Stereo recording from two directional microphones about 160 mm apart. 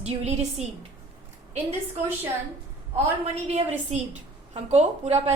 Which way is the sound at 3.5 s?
45° right (ahead or behind).